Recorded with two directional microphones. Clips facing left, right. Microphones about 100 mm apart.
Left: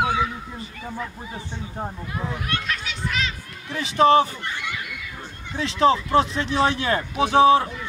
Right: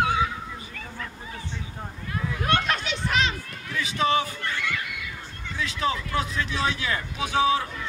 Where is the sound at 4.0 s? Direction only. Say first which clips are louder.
Left 8 dB; 40° left (ahead or behind).